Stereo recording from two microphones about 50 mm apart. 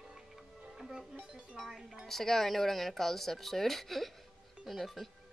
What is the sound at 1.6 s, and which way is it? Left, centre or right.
Speech, centre.